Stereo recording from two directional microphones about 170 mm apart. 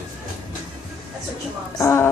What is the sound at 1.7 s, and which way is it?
Speech, 15° left (ahead or behind).